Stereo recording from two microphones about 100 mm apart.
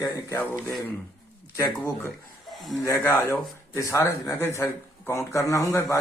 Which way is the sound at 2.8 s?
30° left (ahead or behind).